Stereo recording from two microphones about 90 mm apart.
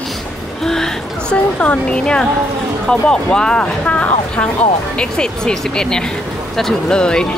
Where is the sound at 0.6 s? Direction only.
5° left (ahead or behind).